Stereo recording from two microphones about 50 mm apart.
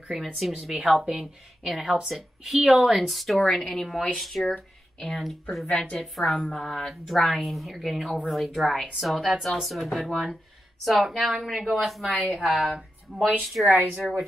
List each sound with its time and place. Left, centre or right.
0.1 s a woman's voice: centre
2.9 s a woman's voice: centre
12.1 s a woman's voice: right
13.4 s speech: centre